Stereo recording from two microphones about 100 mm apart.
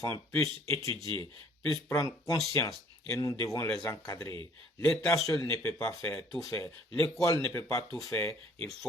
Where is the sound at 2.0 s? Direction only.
45° left (ahead or behind).